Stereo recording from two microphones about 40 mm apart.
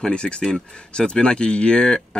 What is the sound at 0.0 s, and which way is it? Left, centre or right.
Speech, left.